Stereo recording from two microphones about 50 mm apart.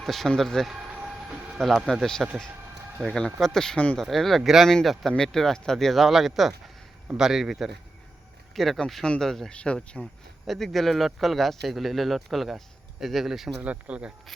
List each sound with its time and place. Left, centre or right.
0.0 s speech: centre
0.7 s siren: right
1.5 s a man's voice: centre
8.5 s speech: centre
9.5 s speech: left
10.4 s speech: centre
13.6 s speech: right